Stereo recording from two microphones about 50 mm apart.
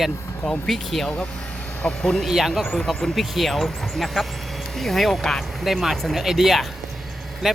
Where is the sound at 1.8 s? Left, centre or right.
Centre.